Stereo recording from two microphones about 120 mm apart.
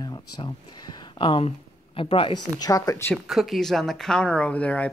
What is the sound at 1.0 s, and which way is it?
Speech, 45° left (ahead or behind).